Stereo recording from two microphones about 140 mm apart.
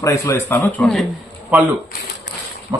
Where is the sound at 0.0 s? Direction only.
20° left (ahead or behind).